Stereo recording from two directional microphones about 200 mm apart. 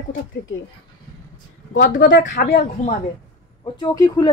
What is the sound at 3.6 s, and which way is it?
Speech, 20° left (ahead or behind).